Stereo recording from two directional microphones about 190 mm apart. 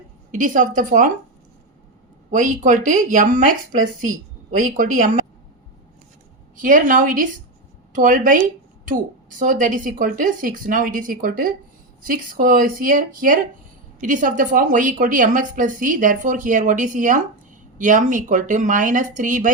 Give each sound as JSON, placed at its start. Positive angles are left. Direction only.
{"t": 0.3, "sound": "a woman's voice", "side_deg": -45}
{"t": 2.3, "sound": "a woman's voice", "side_deg": -45}
{"t": 6.6, "sound": "a woman's voice", "side_deg": -45}